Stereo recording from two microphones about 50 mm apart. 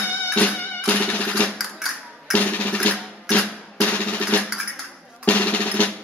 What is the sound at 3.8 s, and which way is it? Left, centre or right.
Drum roll, left.